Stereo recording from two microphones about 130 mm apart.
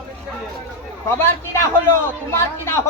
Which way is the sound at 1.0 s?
15° left (ahead or behind).